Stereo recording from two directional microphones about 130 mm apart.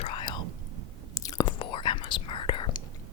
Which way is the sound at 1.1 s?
25° left (ahead or behind).